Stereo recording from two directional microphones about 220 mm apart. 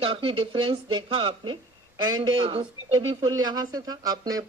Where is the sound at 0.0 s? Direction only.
25° right (ahead or behind).